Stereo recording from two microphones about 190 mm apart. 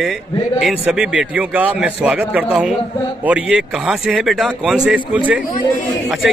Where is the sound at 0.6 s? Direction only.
5° right (ahead or behind).